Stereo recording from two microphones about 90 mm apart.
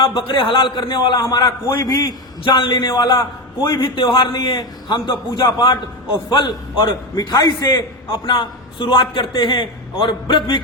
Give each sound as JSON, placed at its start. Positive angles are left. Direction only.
{"t": 0.0, "sound": "a man's voice", "side_deg": 70}
{"t": 2.4, "sound": "a man's voice", "side_deg": 55}
{"t": 7.2, "sound": "a man's voice", "side_deg": 50}